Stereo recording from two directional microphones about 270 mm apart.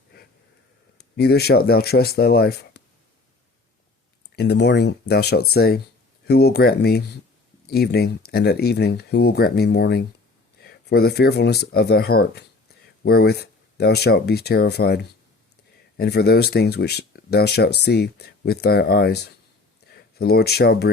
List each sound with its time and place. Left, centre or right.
0.9 s speech: left
4.4 s speech: left